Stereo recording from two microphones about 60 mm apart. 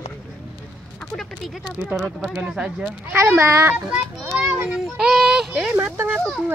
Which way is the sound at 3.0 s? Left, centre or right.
Right.